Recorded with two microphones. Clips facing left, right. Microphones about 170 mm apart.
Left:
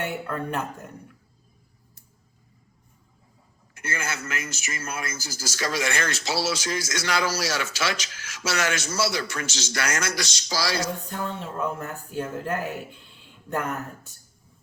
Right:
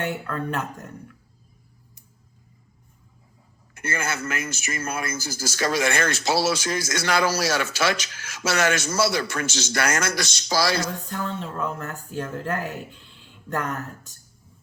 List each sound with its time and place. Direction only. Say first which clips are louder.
0.0 s speech: right 1 dB; 10° left (ahead or behind)
3.8 s a man's voice: right 4 dB; 55° right (ahead or behind)
11.1 s speech: right 1 dB; 15° left (ahead or behind)